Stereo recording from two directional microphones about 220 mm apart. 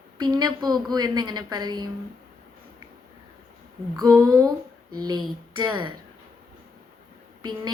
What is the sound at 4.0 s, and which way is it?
A woman's voice, 15° right (ahead or behind).